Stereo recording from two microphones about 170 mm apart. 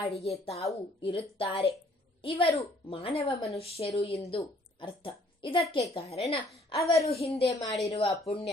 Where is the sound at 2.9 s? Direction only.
35° left (ahead or behind).